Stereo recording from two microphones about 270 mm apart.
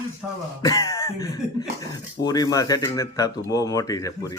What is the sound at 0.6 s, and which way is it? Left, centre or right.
Cough, centre.